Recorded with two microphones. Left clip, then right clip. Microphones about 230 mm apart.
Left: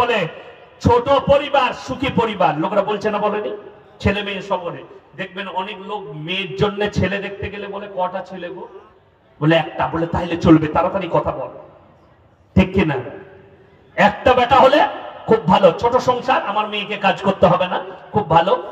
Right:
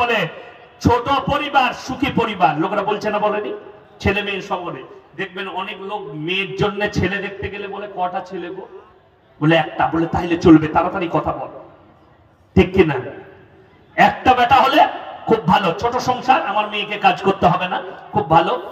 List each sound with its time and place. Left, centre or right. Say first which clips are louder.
0.0 s a sound: even; left
0.8 s a man's voice: left 3 dB; left
9.4 s a man's voice: right 1 dB; left
12.5 s a man's voice: right 3 dB; left